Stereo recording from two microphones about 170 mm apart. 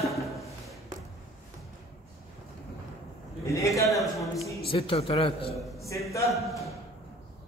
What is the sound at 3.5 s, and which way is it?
Speech, 20° left (ahead or behind).